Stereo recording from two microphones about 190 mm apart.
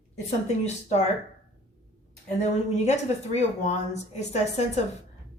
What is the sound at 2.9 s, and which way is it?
Speech, 35° left (ahead or behind).